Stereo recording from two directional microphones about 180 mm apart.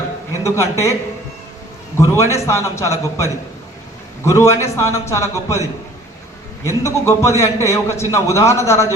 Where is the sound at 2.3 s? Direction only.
15° left (ahead or behind).